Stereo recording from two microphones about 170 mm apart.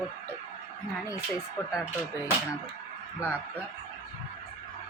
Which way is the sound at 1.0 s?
20° left (ahead or behind).